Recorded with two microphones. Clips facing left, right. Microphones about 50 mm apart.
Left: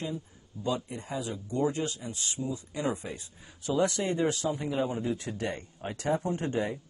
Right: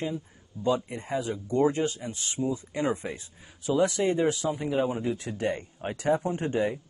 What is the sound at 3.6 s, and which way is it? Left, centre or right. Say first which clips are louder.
Speech: right 3 dB; centre.